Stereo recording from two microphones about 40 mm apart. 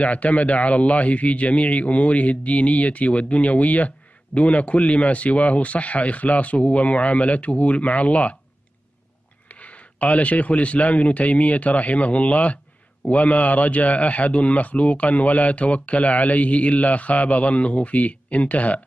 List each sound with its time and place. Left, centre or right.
0.0 s speech: left
9.5 s speech: left